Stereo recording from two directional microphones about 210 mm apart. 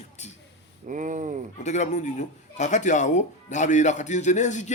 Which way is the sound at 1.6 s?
35° left (ahead or behind).